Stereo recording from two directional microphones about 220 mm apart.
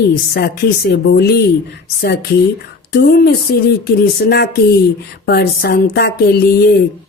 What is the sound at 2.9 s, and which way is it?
Speech, 45° left (ahead or behind).